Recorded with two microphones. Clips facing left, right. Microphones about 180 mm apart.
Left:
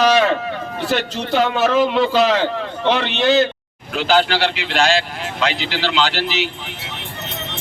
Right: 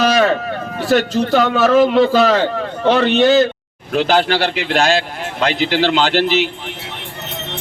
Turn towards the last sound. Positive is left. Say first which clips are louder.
# right 5 dB
turn(degrees=-50)  # may be behind; listen again after turning